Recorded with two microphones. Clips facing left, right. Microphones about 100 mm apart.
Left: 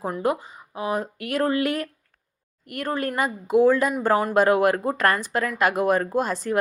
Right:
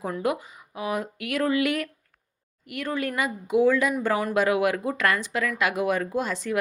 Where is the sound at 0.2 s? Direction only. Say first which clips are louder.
Left 3 dB; 35° left (ahead or behind).